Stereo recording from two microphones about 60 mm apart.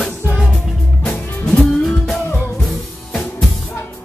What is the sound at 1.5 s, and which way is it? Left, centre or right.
Music, centre.